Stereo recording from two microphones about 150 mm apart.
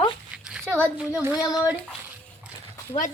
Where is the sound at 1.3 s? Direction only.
25° left (ahead or behind).